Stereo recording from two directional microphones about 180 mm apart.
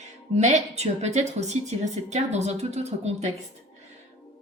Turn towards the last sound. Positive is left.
turn(degrees=-40)  # may be behind; listen again after turning